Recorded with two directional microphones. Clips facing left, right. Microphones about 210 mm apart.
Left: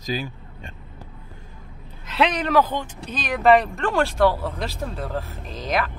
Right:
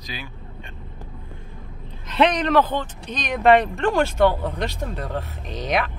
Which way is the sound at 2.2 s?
5° left (ahead or behind).